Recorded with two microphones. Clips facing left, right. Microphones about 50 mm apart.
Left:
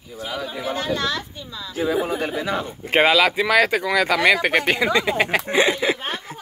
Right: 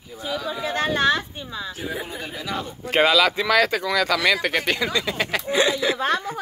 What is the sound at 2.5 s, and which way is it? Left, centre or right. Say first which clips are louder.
Speech: even; left.